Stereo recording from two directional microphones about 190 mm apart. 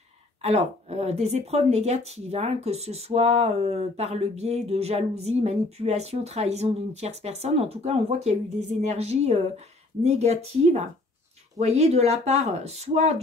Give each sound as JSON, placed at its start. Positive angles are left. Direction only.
{"t": 0.4, "sound": "speech", "side_deg": -35}